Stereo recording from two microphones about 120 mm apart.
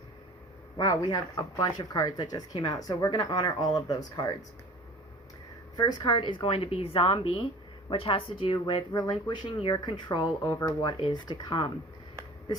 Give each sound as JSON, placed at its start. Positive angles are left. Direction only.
{"t": 0.8, "sound": "speech", "side_deg": 30}
{"t": 5.7, "sound": "a woman's voice", "side_deg": 35}
{"t": 10.7, "sound": "speech", "side_deg": 40}